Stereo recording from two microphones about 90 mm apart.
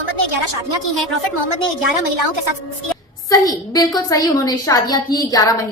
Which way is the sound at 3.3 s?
45° left (ahead or behind).